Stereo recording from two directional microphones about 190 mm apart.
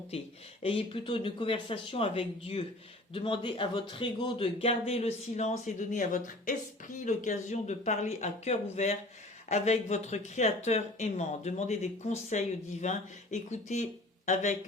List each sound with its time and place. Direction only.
0.1 s speech: 30° left (ahead or behind)